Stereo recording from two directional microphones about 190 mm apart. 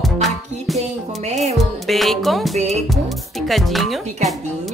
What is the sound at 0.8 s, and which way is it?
Music, 35° right (ahead or behind).